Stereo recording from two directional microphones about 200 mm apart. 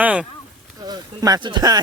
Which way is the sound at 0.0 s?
5° right (ahead or behind).